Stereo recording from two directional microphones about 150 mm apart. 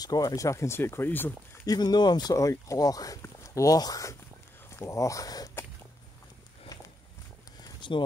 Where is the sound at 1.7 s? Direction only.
30° left (ahead or behind).